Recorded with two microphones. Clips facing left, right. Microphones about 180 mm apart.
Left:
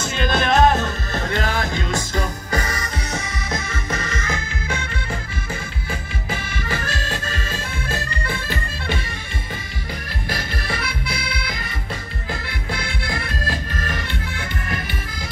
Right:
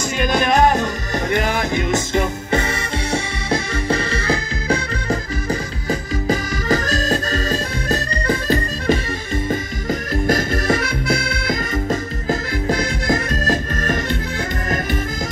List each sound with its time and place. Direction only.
0.0 s music: 15° right (ahead or behind); by 13.9 s 45° right (ahead or behind)